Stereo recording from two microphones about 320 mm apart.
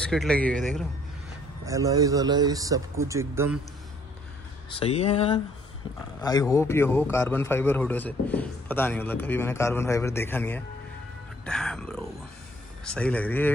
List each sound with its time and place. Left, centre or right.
0.0 s speech: centre
1.7 s speech: centre
4.7 s a man's voice: centre